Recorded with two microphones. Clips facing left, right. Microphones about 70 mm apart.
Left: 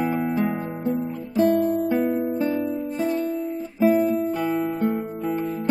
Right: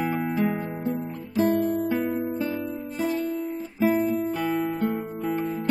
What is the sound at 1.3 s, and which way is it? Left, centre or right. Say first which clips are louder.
Music: left 3 dB; centre.